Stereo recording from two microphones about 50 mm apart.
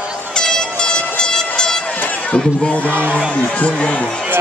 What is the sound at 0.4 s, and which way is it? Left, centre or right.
Train, centre.